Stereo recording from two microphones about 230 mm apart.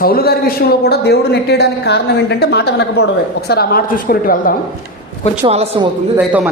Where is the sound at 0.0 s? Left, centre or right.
Left.